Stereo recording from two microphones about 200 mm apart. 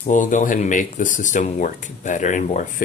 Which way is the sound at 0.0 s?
40° left (ahead or behind).